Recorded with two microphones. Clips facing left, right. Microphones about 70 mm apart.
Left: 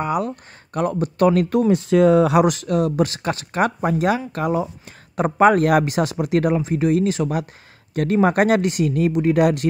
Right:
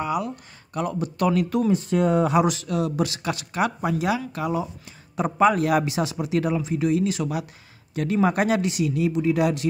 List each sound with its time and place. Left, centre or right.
0.0 s a man's voice: left
1.7 s speech: left
2.4 s a man's voice: left